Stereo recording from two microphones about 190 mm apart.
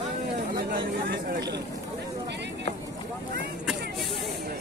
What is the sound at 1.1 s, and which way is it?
Vehicle, 55° right (ahead or behind).